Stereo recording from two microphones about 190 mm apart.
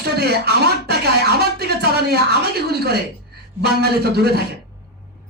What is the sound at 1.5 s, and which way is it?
A man's voice, 55° right (ahead or behind).